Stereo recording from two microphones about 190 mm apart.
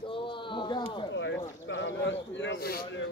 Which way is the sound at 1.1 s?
70° left (ahead or behind).